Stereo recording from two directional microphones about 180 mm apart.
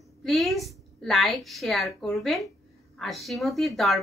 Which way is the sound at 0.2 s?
Centre (ahead or behind).